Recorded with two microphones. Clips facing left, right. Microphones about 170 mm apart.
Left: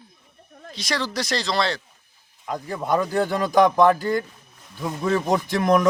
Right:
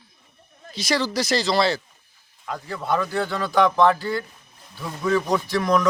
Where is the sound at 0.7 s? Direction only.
Centre (ahead or behind).